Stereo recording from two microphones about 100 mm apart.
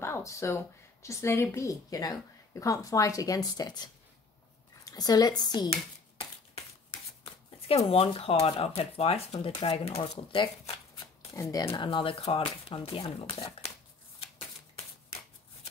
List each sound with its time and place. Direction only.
0.0 s a sound: 30° left (ahead or behind)
1.0 s a woman's voice: 30° left (ahead or behind); by 5.7 s 45° left (ahead or behind)
7.6 s speech: 80° left; by 10.5 s 65° left (ahead or behind)
11.3 s speech: 35° left (ahead or behind)
11.8 s speech: 55° left (ahead or behind); by 13.1 s 70° left (ahead or behind)